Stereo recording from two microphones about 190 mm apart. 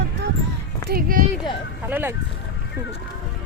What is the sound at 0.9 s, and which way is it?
Speech, 50° right (ahead or behind).